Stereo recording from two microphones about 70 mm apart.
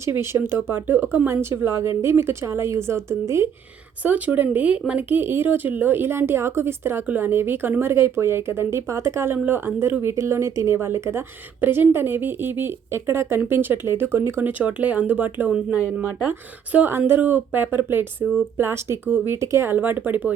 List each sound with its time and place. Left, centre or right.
0.0 s a woman's voice: right
4.0 s a woman's voice: right
14.6 s a woman's voice: right
19.7 s speech: right